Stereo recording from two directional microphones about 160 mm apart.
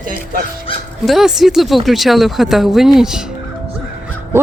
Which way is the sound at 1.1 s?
Centre (ahead or behind).